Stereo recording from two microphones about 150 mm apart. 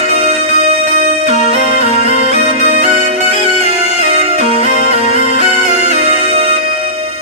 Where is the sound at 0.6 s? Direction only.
45° right (ahead or behind).